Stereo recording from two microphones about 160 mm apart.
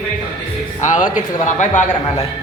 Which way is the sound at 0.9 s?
50° left (ahead or behind).